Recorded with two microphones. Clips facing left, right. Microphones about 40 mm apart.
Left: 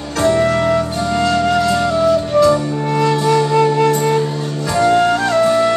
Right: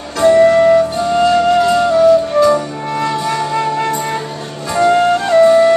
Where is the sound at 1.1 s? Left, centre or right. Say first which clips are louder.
Right 4 dB; centre.